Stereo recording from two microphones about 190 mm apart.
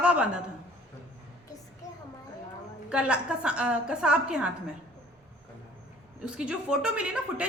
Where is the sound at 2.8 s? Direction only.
5° right (ahead or behind).